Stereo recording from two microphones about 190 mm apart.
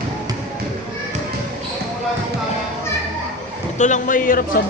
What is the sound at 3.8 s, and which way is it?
Speech, 40° left (ahead or behind).